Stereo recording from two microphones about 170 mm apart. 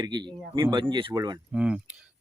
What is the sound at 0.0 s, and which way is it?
Speech, 25° right (ahead or behind).